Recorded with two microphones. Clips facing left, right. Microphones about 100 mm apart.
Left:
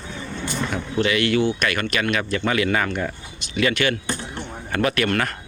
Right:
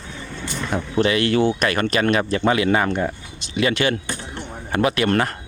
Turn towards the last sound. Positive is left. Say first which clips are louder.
# right 2 dB
turn(degrees=-25)  # may be behind; listen again after turning